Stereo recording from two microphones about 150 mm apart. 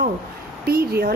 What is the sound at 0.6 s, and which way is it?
Speech, 90° right.